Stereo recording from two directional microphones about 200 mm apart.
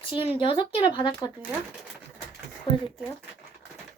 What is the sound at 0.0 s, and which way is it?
Speech, 25° left (ahead or behind).